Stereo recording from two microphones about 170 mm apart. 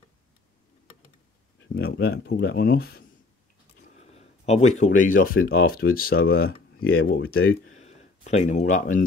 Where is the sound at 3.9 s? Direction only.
40° left (ahead or behind).